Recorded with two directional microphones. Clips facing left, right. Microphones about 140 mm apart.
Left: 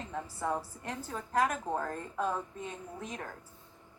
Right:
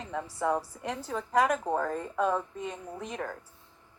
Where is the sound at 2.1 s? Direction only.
75° right (ahead or behind).